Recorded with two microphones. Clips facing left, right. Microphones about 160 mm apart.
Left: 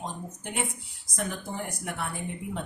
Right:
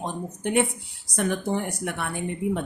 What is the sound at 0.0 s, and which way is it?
Speech, 65° right (ahead or behind).